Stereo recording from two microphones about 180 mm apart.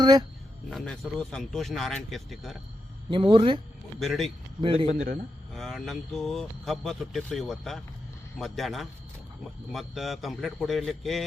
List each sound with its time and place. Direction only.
0.0 s speech: 20° right (ahead or behind)
0.7 s speech: centre (ahead or behind)
3.1 s speech: 25° right (ahead or behind)
4.0 s speech: centre (ahead or behind)
4.6 s speech: 30° right (ahead or behind)
4.9 s a man's voice: 55° right (ahead or behind)
5.5 s speech: centre (ahead or behind)